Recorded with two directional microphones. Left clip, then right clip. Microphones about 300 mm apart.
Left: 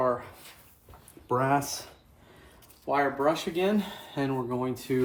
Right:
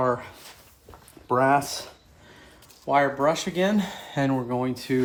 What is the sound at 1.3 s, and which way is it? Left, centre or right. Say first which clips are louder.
Speech: right 5 dB; right.